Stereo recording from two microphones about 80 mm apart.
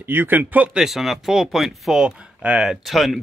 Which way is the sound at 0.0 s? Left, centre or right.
Right.